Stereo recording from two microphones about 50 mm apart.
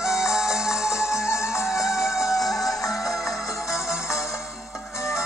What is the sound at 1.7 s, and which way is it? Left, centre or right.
Music, left.